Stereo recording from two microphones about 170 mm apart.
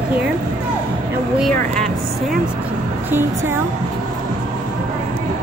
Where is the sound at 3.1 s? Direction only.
15° right (ahead or behind).